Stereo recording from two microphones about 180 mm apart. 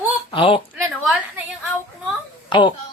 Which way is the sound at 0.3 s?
30° left (ahead or behind).